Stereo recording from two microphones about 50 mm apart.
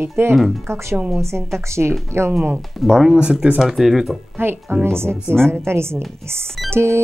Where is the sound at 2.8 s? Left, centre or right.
Centre.